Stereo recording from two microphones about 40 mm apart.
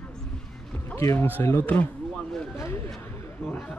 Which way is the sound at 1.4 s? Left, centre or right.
Left.